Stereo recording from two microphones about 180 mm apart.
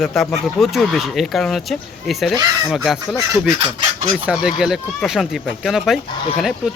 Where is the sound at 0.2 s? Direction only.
Centre (ahead or behind).